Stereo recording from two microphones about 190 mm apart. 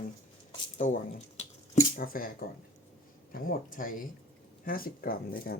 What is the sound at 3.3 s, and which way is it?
Speech, 45° left (ahead or behind).